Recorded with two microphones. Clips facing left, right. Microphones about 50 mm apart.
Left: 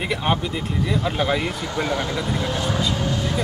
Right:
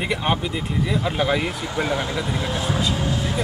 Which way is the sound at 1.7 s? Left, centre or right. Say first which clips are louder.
Even; centre.